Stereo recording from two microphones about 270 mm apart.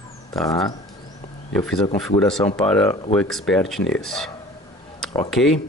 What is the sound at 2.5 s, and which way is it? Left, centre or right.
Speech, centre.